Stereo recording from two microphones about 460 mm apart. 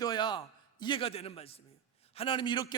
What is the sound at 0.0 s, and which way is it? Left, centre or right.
A man's voice, centre.